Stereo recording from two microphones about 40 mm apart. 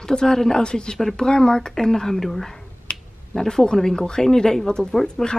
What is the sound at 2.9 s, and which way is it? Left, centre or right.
Finger snapping, left.